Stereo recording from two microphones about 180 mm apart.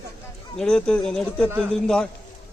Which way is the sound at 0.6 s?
5° left (ahead or behind).